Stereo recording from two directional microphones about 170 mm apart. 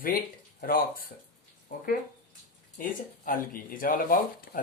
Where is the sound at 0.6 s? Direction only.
55° left (ahead or behind).